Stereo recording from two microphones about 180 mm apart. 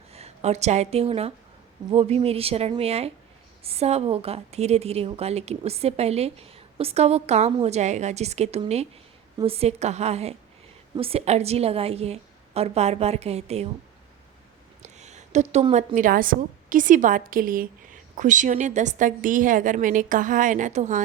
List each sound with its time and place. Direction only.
0.1 s a woman's voice: 35° right (ahead or behind)
14.8 s a sound: 40° right (ahead or behind)
15.7 s a woman's voice: 40° right (ahead or behind)